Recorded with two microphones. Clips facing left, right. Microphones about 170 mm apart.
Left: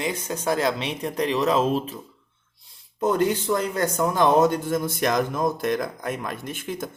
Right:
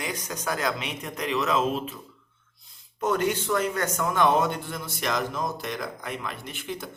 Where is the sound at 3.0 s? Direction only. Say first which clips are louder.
Left 4 dB; 35° left (ahead or behind).